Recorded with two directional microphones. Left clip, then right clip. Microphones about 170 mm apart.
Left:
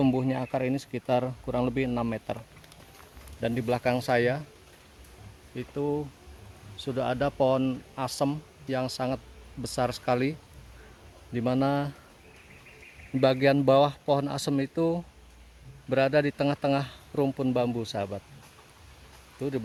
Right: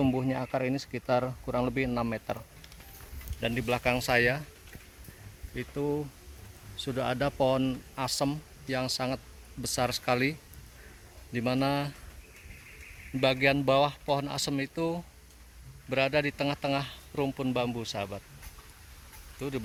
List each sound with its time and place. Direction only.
0.0 s speech: 15° left (ahead or behind)
3.4 s speech: 20° left (ahead or behind)
5.5 s a man's voice: 5° right (ahead or behind); by 11.9 s 20° left (ahead or behind)
13.1 s speech: 40° left (ahead or behind)
19.4 s speech: 30° left (ahead or behind)